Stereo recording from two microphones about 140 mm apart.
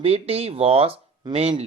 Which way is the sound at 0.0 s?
45° right (ahead or behind).